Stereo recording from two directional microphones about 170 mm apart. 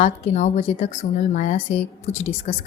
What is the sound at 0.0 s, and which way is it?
A woman's voice, 45° left (ahead or behind).